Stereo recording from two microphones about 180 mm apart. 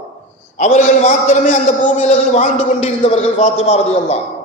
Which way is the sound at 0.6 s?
40° left (ahead or behind).